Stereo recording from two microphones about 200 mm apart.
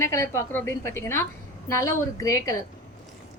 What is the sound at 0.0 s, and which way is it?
A woman's voice, 15° left (ahead or behind).